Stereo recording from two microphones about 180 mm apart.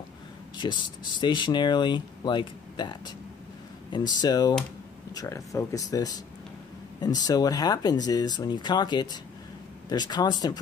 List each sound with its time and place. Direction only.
0.6 s speech: 25° left (ahead or behind)
4.2 s speech: 20° left (ahead or behind)